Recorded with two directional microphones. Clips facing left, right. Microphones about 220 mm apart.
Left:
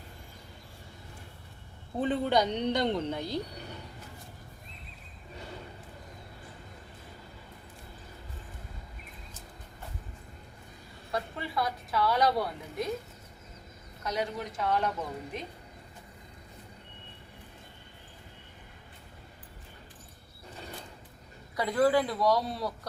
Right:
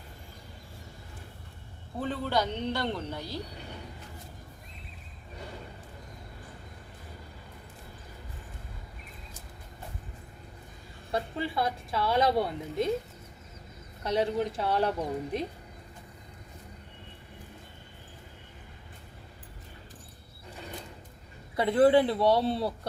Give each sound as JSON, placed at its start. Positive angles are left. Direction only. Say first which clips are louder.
{"t": 2.0, "sound": "a man's voice", "louder": "left 3 dB", "side_deg": 20}
{"t": 11.1, "sound": "a woman's voice", "louder": "right 3 dB", "side_deg": -30}
{"t": 14.0, "sound": "a woman's voice", "louder": "right 6 dB", "side_deg": -30}
{"t": 21.5, "sound": "a woman's voice", "louder": "right 4 dB", "side_deg": -25}